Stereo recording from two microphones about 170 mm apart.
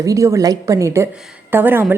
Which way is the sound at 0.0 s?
20° right (ahead or behind).